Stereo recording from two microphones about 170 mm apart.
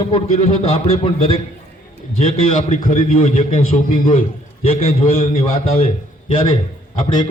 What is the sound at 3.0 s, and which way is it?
A man's voice, 40° left (ahead or behind).